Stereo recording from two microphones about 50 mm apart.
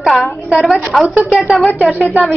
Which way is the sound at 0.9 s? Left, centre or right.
Right.